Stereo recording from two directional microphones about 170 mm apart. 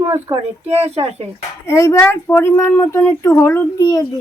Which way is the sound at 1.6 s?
15° left (ahead or behind).